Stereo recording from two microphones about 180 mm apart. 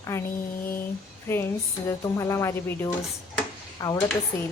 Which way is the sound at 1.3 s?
15° left (ahead or behind).